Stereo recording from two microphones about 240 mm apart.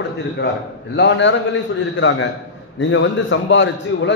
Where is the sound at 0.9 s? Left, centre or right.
Left.